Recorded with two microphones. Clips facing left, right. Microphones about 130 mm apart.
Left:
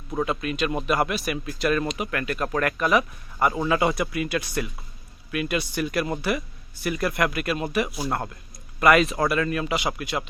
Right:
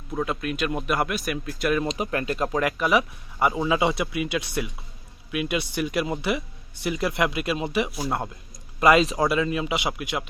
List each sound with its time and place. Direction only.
0.1 s speech: 5° left (ahead or behind)
1.6 s speech: 10° right (ahead or behind)
1.9 s speech: 30° right (ahead or behind); by 8.3 s 10° right (ahead or behind)
8.8 s speech: 25° right (ahead or behind)
9.1 s speech: 15° right (ahead or behind)